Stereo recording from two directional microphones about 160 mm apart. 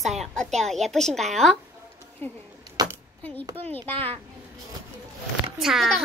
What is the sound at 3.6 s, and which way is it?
Speech, 10° left (ahead or behind).